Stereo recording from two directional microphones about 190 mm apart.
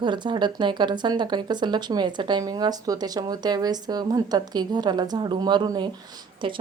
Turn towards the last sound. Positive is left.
turn(degrees=-25)  # may be behind; listen again after turning